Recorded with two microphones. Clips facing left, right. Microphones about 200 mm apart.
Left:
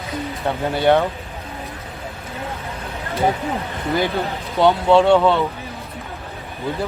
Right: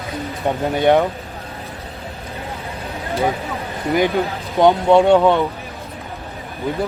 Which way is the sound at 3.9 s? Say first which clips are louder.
Right 4 dB; 15° right (ahead or behind).